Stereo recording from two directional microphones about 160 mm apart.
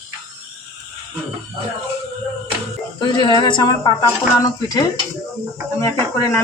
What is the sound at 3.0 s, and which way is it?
A man's voice, 25° left (ahead or behind).